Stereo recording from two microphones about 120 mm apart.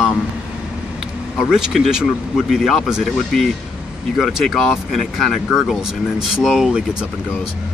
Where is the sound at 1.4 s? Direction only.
Centre (ahead or behind).